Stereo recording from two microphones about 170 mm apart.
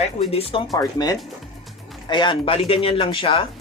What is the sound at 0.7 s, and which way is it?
Speech, 20° left (ahead or behind).